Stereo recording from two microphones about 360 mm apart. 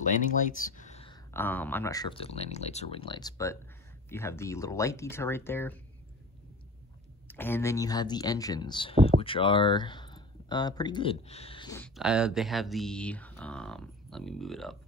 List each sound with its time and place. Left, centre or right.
0.0 s speech: left
1.3 s speech: centre
7.2 s speech: centre